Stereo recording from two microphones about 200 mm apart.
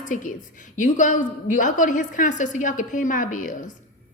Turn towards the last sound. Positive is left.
turn(degrees=40)  # may be behind; listen again after turning